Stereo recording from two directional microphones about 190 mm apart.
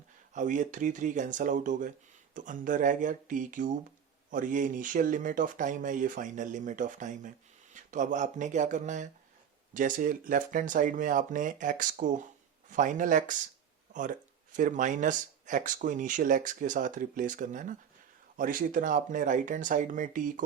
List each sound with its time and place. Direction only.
0.3 s speech: 40° right (ahead or behind)